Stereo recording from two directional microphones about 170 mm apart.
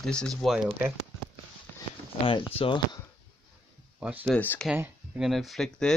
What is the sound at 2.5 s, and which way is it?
Speech, 35° left (ahead or behind).